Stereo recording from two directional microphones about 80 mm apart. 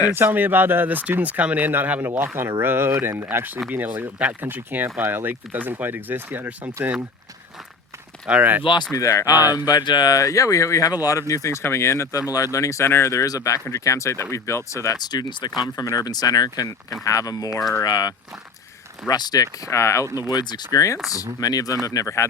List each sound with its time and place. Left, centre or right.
0.1 s speech: right
8.3 s speech: right
8.6 s speech: left
8.9 s speech: left
10.2 s speech: left
12.3 s speech: left
15.0 s speech: left
20.3 s speech: left